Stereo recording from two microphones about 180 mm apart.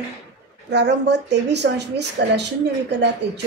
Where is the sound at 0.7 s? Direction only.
70° right (ahead or behind).